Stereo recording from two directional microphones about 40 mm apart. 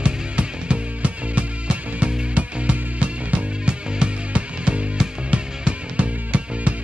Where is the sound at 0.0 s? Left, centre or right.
Right.